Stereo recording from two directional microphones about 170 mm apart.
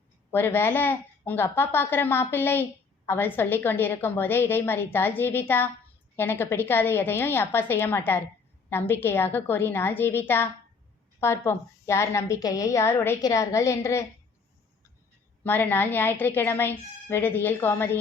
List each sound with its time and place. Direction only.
0.3 s a woman's voice: 15° left (ahead or behind)
15.4 s a woman's voice: 10° left (ahead or behind)